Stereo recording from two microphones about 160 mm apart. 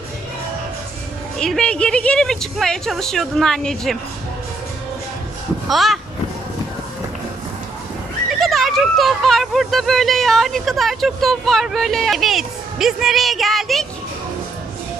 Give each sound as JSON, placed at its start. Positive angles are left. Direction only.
{"t": 1.4, "sound": "a woman's voice", "side_deg": 5}
{"t": 5.6, "sound": "a woman's voice", "side_deg": 0}
{"t": 8.3, "sound": "speech", "side_deg": 0}